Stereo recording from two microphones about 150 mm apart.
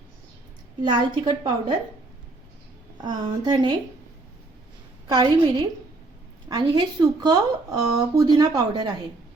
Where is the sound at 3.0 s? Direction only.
35° right (ahead or behind).